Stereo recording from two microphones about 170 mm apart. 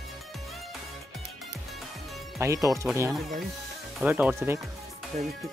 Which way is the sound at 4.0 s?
10° right (ahead or behind).